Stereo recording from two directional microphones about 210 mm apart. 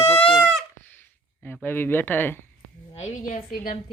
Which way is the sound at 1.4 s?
10° left (ahead or behind).